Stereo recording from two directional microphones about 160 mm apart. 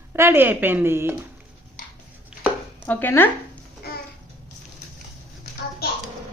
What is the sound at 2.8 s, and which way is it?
Speech, 10° left (ahead or behind).